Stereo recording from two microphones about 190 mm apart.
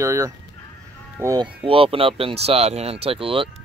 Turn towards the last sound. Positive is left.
turn(degrees=-30)  # may be behind; listen again after turning